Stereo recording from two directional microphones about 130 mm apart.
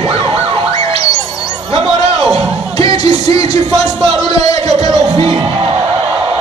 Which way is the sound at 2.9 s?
55° right (ahead or behind).